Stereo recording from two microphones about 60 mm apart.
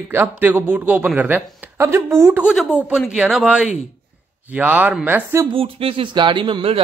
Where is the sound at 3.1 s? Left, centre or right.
Centre.